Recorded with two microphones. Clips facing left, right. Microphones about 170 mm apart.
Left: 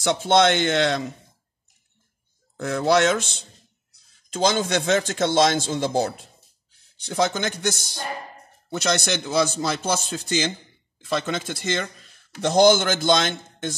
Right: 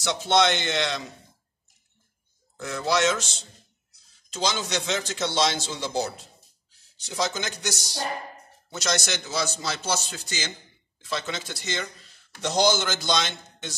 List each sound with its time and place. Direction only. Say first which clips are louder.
0.0 s a man's voice: left 4 dB; 50° left (ahead or behind)
2.5 s a man's voice: left 6 dB; 55° left (ahead or behind)